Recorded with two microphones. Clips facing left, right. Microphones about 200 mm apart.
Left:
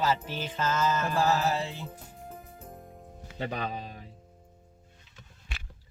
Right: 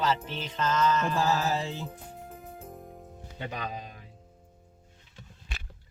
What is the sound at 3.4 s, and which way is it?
Speech, 30° left (ahead or behind).